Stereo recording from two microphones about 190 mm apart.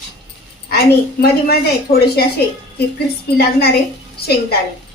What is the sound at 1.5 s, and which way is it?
Speech, 55° left (ahead or behind).